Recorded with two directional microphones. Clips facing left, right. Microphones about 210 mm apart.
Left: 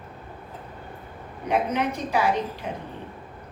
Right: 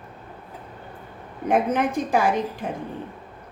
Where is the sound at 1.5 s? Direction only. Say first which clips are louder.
Right 3 dB; 50° right (ahead or behind).